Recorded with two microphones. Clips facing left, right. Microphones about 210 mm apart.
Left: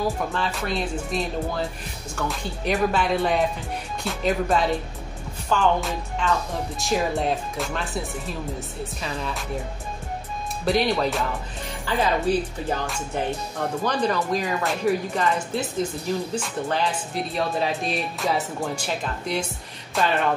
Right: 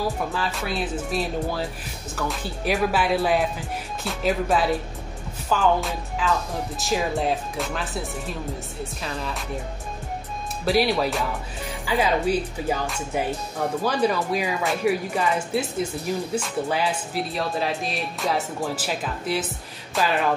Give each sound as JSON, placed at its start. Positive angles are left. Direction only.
{"t": 0.3, "sound": "speech", "side_deg": 0}
{"t": 10.6, "sound": "speech", "side_deg": -5}